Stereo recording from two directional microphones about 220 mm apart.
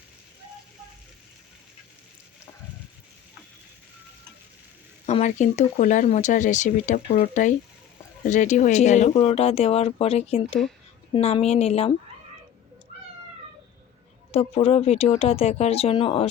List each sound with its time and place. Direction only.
5.0 s speech: 30° left (ahead or behind)
14.3 s speech: 30° left (ahead or behind)